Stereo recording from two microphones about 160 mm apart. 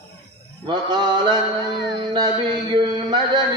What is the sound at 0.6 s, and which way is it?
Mantra, 30° right (ahead or behind).